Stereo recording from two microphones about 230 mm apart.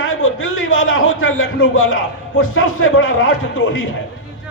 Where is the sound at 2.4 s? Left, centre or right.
Left.